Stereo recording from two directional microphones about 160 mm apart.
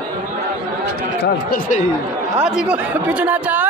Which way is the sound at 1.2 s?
90° left.